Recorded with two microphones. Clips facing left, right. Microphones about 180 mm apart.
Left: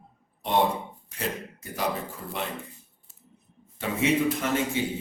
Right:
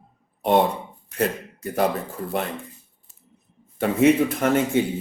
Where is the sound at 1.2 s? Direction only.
55° right (ahead or behind).